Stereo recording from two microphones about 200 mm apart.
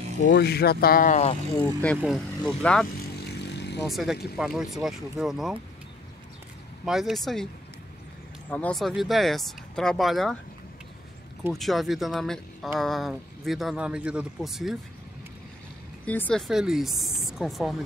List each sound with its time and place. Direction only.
0.3 s speech: 55° left (ahead or behind); by 1.4 s 35° left (ahead or behind)
1.6 s speech: 5° left (ahead or behind)
3.0 s vehicle: 55° left (ahead or behind)
3.8 s speech: centre (ahead or behind)
6.9 s speech: centre (ahead or behind)
8.5 s speech: 5° left (ahead or behind)
11.5 s speech: centre (ahead or behind)
16.1 s speech: 5° left (ahead or behind)